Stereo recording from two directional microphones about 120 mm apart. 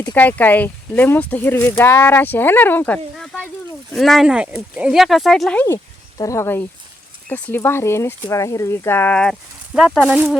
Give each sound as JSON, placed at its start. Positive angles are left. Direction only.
{"t": 0.0, "sound": "speech", "side_deg": 15}
{"t": 5.5, "sound": "speech", "side_deg": 20}
{"t": 9.7, "sound": "speech", "side_deg": -5}